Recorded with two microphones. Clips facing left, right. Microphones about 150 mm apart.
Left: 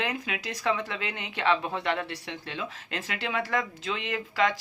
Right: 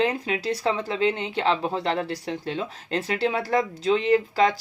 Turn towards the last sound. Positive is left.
turn(degrees=-35)  # may be behind; listen again after turning